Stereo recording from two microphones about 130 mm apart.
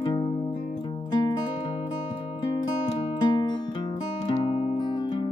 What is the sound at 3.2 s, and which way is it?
Music, 35° left (ahead or behind).